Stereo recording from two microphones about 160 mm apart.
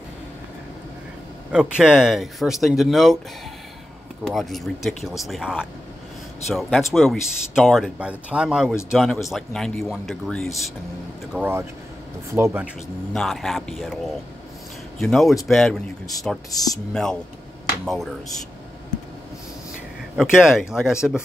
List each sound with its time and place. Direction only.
1.5 s speech: 5° right (ahead or behind)
4.2 s speech: centre (ahead or behind)
11.3 s speech: 10° right (ahead or behind)
13.1 s speech: centre (ahead or behind)
16.4 s speech: 20° left (ahead or behind)
16.9 s speech: 5° left (ahead or behind)
20.2 s speech: 5° right (ahead or behind)